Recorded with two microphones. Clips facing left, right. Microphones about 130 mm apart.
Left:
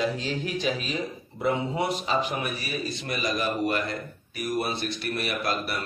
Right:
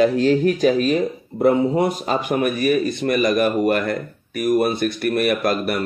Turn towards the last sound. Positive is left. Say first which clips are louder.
# right 9 dB
turn(degrees=-55)  # may be behind; listen again after turning